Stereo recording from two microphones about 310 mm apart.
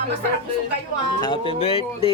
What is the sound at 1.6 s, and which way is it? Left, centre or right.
Speech, centre.